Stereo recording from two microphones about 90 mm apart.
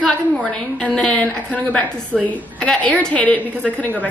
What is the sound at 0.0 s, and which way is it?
A woman's voice, 10° left (ahead or behind).